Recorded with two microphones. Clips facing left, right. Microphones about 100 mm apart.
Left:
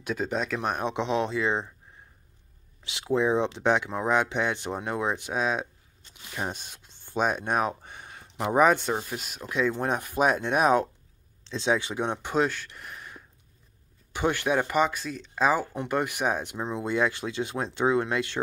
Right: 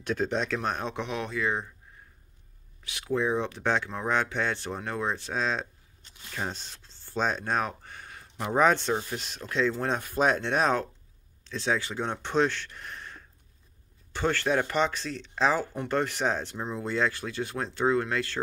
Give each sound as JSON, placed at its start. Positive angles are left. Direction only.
{"t": 0.0, "sound": "speech", "side_deg": 5}
{"t": 2.8, "sound": "speech", "side_deg": 25}